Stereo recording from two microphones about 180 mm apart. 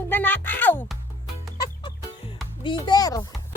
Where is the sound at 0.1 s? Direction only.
10° left (ahead or behind).